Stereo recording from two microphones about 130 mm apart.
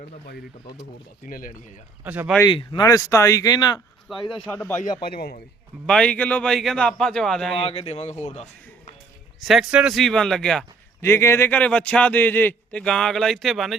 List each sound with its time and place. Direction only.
1.3 s speech: 90° left
2.0 s speech: 10° right (ahead or behind)
2.5 s speech: 40° left (ahead or behind)
2.8 s speech: 25° left (ahead or behind)
4.1 s a man's voice: 5° right (ahead or behind)
4.4 s a man's voice: 15° left (ahead or behind)
5.8 s a man's voice: 5° left (ahead or behind)
7.6 s speech: 50° left (ahead or behind)
9.4 s a man's voice: centre (ahead or behind)
11.0 s a man's voice: 20° left (ahead or behind); by 13.7 s centre (ahead or behind)